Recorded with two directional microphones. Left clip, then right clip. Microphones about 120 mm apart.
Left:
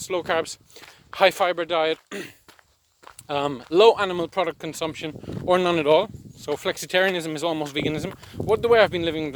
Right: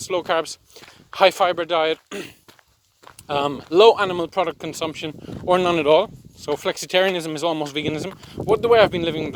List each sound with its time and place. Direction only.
0.0 s speech: 45° right (ahead or behind)